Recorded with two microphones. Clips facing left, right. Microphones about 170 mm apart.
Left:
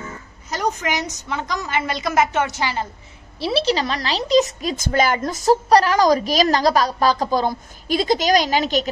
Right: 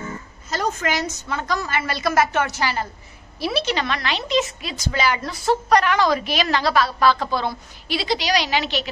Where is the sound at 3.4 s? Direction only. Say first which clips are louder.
Left 3 dB; 30° left (ahead or behind).